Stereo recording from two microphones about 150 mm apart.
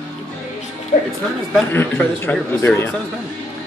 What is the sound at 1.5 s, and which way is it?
A man's voice, 10° left (ahead or behind).